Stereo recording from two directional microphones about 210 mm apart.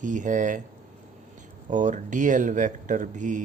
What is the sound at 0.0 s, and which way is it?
Speech, 35° right (ahead or behind).